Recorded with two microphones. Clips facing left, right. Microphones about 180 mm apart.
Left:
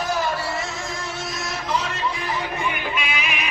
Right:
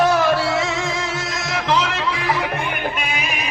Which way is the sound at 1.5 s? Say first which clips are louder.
Right 7 dB; 90° right.